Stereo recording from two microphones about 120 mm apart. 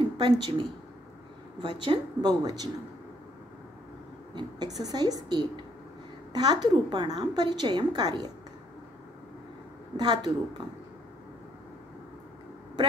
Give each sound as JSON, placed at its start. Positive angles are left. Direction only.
{"t": 0.0, "sound": "a woman's voice", "side_deg": -45}
{"t": 4.4, "sound": "a woman's voice", "side_deg": -35}
{"t": 9.9, "sound": "a woman's voice", "side_deg": -40}